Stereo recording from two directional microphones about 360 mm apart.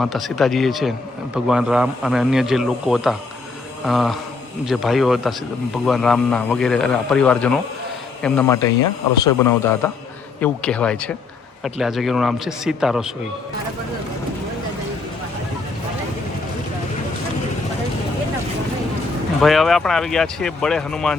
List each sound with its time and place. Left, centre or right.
0.0 s a man's voice: centre
19.4 s a man's voice: centre